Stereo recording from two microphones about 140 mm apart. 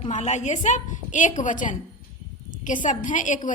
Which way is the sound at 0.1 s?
55° left (ahead or behind).